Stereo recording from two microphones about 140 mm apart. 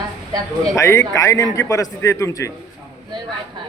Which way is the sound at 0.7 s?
20° left (ahead or behind).